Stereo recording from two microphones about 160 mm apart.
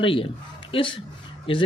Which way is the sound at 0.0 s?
35° left (ahead or behind).